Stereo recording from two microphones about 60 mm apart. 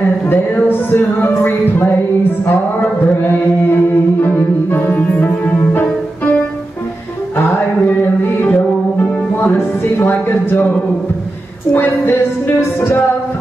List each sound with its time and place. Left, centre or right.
0.3 s speech: left
4.2 s music: left
9.9 s speech: left